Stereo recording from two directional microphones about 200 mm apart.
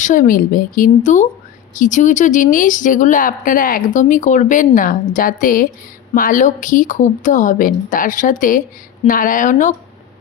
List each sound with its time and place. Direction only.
0.0 s speech: 40° left (ahead or behind)